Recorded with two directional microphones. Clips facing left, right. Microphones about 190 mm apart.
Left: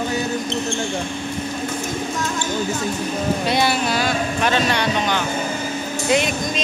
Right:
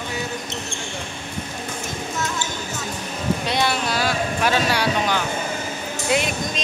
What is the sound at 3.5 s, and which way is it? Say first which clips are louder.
Speech: left 3 dB; 5° left (ahead or behind).